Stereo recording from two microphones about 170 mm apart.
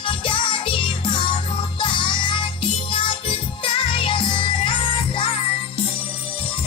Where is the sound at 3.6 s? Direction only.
30° left (ahead or behind).